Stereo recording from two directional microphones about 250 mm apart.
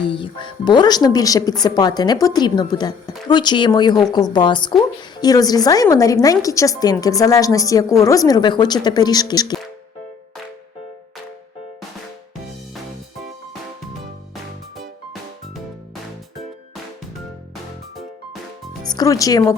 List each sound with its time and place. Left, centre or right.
0.1 s a woman's voice: centre
18.9 s speech: centre